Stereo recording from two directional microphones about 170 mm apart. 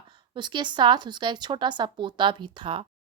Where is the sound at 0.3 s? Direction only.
25° right (ahead or behind).